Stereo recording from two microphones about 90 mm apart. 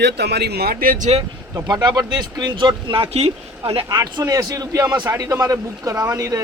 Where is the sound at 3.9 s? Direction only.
45° right (ahead or behind).